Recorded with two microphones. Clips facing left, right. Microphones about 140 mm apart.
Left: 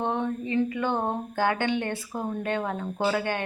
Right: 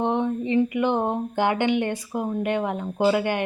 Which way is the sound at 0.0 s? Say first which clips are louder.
Right 4 dB; 20° right (ahead or behind).